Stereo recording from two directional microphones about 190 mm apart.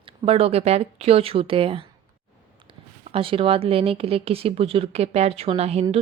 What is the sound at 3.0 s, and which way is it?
Speech, 30° right (ahead or behind).